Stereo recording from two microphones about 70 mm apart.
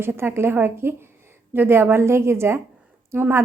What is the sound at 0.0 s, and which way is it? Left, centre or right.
A woman's voice, right.